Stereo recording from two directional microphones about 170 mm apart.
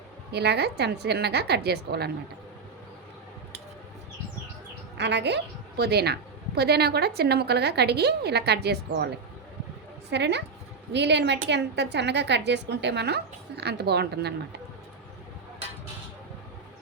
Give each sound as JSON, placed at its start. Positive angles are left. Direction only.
{"t": 0.3, "sound": "a woman's voice", "side_deg": -75}
{"t": 4.9, "sound": "a woman's voice", "side_deg": -90}
{"t": 10.1, "sound": "a woman's voice", "side_deg": -85}